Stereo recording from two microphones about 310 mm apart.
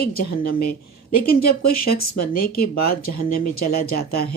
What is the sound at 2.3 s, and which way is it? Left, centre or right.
Speech, left.